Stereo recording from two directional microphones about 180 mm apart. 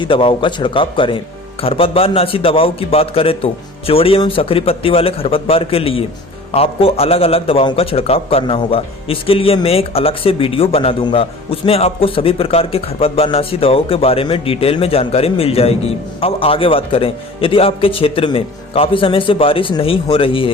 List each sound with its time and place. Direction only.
0.0 s a man's voice: 30° left (ahead or behind)